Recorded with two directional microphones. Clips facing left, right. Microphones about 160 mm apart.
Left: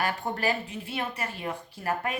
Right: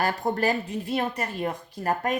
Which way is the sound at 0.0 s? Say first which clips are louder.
Right 4 dB; 40° right (ahead or behind).